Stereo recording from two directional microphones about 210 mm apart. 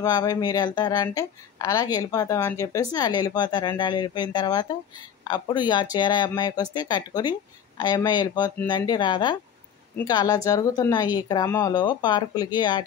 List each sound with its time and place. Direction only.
0.0 s a woman's voice: 20° left (ahead or behind)